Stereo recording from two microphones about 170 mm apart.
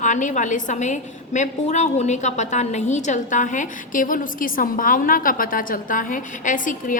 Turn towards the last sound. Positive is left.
turn(degrees=50)  # may be behind; listen again after turning